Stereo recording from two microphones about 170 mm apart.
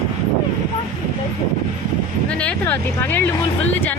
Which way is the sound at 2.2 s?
5° left (ahead or behind).